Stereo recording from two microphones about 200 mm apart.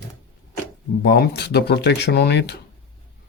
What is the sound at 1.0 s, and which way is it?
Speech, 55° left (ahead or behind).